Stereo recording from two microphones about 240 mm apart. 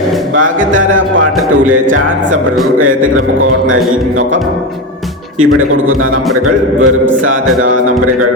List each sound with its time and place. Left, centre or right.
6.8 s a man's voice: right